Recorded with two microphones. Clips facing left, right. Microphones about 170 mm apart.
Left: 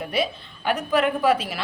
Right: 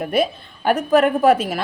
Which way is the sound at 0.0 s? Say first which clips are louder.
Right 6 dB; 50° right (ahead or behind).